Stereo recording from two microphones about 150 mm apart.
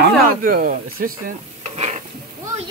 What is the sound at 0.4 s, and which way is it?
Speech, 65° right (ahead or behind).